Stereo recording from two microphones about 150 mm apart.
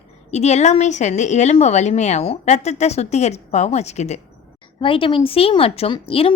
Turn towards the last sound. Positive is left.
turn(degrees=35)  # may be behind; listen again after turning